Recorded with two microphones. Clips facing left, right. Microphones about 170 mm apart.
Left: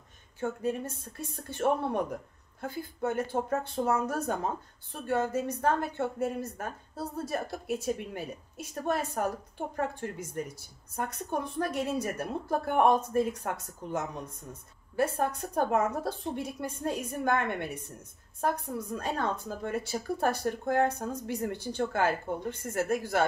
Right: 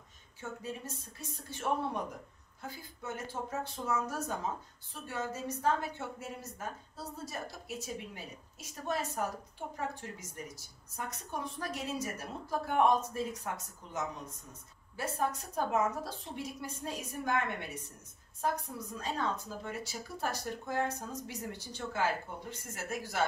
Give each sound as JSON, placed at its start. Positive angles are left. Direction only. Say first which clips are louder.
{"t": 0.4, "sound": "a woman's voice", "louder": "left 10 dB", "side_deg": 55}